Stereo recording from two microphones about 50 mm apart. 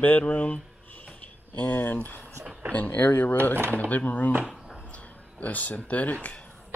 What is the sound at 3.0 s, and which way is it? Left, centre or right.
Speech, left.